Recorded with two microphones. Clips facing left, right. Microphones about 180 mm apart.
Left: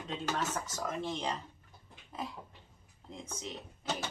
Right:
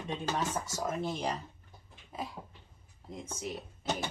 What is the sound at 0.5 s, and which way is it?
Speech, 10° right (ahead or behind).